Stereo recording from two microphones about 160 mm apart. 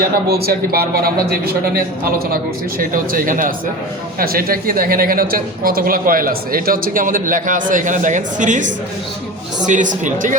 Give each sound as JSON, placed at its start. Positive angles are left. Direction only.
{"t": 0.3, "sound": "a woman's voice", "side_deg": -75}